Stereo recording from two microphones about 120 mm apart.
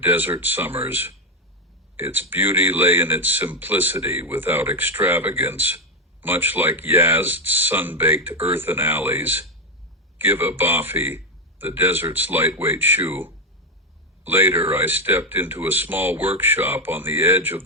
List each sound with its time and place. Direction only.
0.0 s speech: 15° right (ahead or behind)